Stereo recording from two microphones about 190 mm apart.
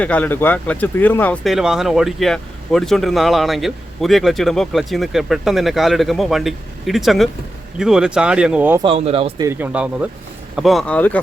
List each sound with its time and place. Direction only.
0.0 s speech: 10° left (ahead or behind); by 8.8 s 10° right (ahead or behind)
8.8 s speech: 30° right (ahead or behind)
9.4 s speech: 10° right (ahead or behind); by 11.2 s 5° left (ahead or behind)